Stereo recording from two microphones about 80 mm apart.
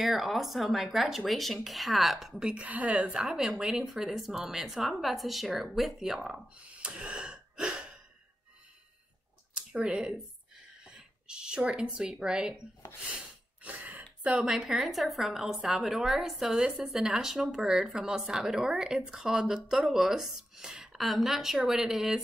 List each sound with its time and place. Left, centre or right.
0.0 s a woman's voice: centre
6.8 s a sound: centre
9.6 s speech: centre
13.6 s throat clearing: right
14.2 s a woman's voice: centre